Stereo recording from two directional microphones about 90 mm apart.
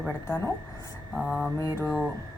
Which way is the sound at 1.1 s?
Centre (ahead or behind).